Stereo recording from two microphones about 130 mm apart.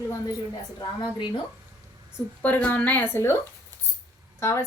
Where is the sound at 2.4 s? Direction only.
10° left (ahead or behind).